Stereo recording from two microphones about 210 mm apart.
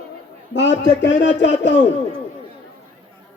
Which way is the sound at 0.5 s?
60° left (ahead or behind).